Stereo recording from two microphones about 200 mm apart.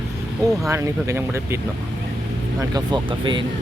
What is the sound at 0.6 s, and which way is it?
Speech, 15° right (ahead or behind).